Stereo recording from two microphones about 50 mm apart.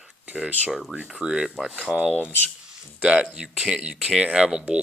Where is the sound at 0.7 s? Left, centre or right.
Centre.